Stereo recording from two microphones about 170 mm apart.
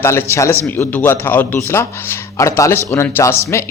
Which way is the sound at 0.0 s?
15° left (ahead or behind).